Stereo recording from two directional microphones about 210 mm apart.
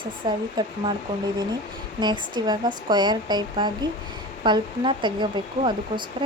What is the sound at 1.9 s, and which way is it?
Speech, 20° right (ahead or behind).